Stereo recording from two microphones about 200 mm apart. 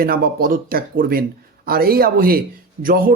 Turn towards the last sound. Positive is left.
turn(degrees=-45)  # may be behind; listen again after turning